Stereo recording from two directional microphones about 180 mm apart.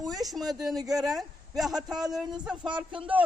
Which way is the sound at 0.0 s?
20° right (ahead or behind).